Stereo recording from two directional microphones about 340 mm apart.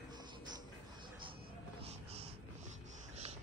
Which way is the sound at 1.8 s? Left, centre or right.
Centre.